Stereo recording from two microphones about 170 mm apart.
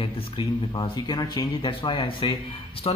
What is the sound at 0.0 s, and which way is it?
A man's voice, 30° left (ahead or behind).